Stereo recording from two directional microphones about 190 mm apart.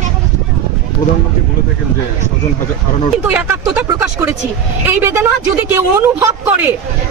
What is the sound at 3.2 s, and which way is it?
Speech, 10° right (ahead or behind).